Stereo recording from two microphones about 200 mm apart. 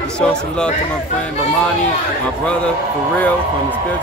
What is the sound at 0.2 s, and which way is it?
Speech, 5° left (ahead or behind).